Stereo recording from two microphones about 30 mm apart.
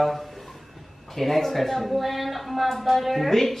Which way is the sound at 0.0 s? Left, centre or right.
Centre.